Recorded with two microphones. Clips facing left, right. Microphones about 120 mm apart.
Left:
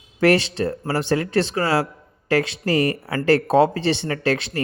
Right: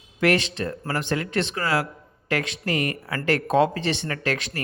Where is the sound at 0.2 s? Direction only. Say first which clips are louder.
Left 4 dB; 35° left (ahead or behind).